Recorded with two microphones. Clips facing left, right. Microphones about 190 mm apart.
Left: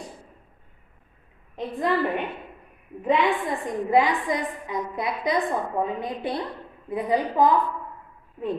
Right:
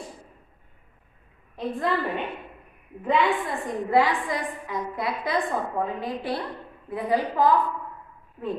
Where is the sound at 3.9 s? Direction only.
20° left (ahead or behind).